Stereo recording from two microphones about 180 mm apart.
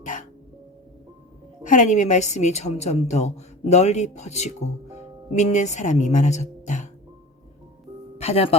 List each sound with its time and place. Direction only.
0.0 s music: 45° left (ahead or behind)
1.6 s a woman's voice: 45° left (ahead or behind)
8.2 s a woman's voice: 35° left (ahead or behind)